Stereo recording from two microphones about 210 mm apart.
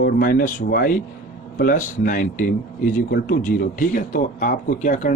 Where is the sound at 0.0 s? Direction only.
45° left (ahead or behind).